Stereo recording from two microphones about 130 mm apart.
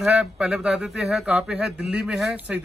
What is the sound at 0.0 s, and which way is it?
Speech, 10° right (ahead or behind).